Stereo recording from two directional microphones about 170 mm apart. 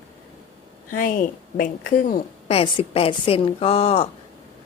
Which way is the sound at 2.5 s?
35° left (ahead or behind).